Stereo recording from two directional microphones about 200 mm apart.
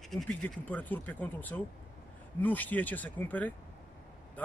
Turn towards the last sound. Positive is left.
turn(degrees=5)  # may be behind; listen again after turning